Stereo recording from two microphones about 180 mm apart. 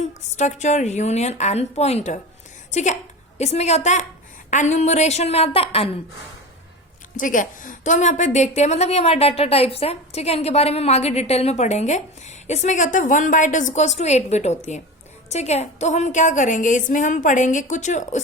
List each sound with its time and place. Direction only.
0.0 s a woman's voice: 40° left (ahead or behind)
7.2 s a woman's voice: 45° left (ahead or behind)